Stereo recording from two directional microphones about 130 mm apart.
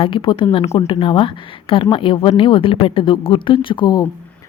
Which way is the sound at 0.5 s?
55° left (ahead or behind).